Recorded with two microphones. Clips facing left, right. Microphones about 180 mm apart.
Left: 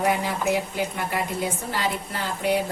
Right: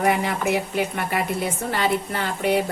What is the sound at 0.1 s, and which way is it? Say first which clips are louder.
A woman's voice: right 2 dB; 65° right (ahead or behind).